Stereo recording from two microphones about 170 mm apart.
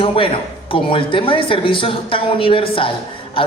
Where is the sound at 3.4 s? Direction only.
30° left (ahead or behind).